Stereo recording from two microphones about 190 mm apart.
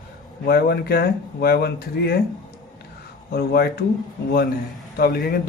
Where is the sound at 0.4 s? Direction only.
55° left (ahead or behind).